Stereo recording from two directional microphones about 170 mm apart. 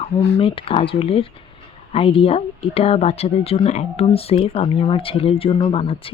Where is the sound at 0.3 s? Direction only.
35° left (ahead or behind).